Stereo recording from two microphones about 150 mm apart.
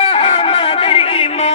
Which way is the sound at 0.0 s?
40° left (ahead or behind).